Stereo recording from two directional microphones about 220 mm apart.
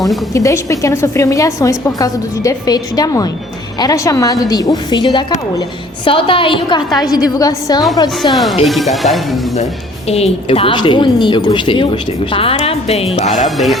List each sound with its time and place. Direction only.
0.3 s a woman's voice: 15° left (ahead or behind)
8.3 s speech: centre (ahead or behind)
10.1 s a woman's voice: 30° left (ahead or behind)
13.3 s speech: centre (ahead or behind)